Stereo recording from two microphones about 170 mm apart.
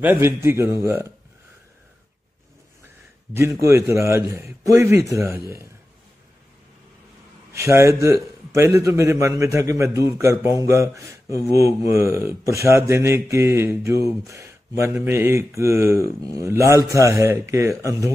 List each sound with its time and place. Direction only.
0.0 s a man's voice: 10° right (ahead or behind)
3.6 s a man's voice: 15° right (ahead or behind)
7.5 s a man's voice: 15° right (ahead or behind)